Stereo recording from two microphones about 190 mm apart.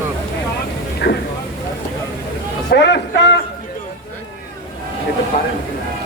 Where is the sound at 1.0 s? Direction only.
55° left (ahead or behind).